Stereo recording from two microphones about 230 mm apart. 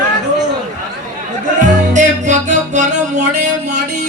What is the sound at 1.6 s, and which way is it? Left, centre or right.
Music, right.